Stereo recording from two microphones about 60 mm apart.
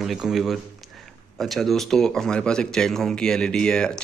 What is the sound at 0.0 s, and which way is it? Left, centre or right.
Speech, centre.